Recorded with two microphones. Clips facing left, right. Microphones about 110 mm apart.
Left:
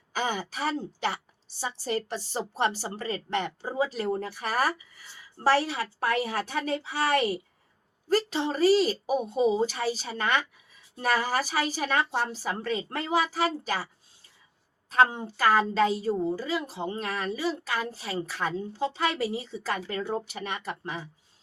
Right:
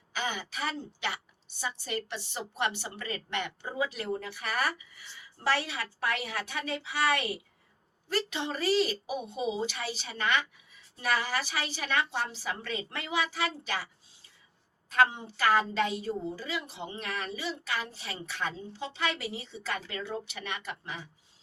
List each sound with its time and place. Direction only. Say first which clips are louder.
0.1 s a woman's voice: left 5 dB; 40° left (ahead or behind)
14.8 s a woman's voice: left 3 dB; 30° left (ahead or behind)